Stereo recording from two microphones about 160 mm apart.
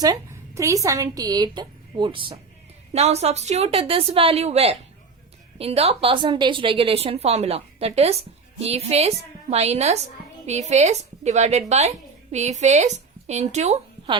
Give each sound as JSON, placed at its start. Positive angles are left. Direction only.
{"t": 0.0, "sound": "speech", "side_deg": -20}
{"t": 2.9, "sound": "a woman's voice", "side_deg": -40}